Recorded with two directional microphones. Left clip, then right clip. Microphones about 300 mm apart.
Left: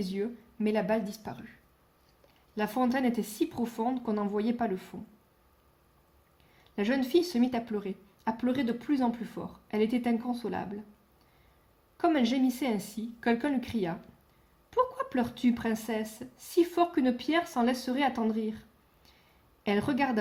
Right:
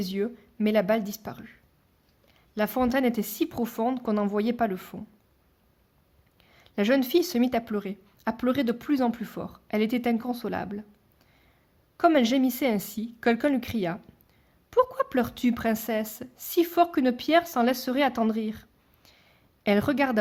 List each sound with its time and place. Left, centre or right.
0.0 s speech: right
2.6 s speech: right
6.6 s speech: right
11.9 s speech: right
19.6 s speech: right